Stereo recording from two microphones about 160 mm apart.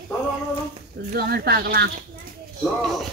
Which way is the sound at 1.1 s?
75° right (ahead or behind).